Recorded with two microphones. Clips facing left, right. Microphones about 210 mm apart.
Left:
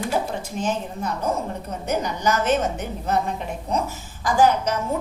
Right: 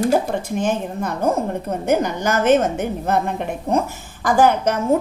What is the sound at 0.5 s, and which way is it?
A woman's voice, 60° right (ahead or behind).